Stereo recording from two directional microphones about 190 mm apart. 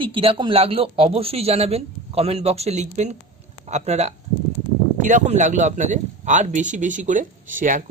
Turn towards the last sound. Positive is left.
turn(degrees=-45)  # may be behind; listen again after turning